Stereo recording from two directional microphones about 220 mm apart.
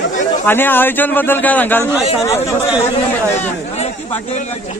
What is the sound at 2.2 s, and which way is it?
Speech, 15° left (ahead or behind).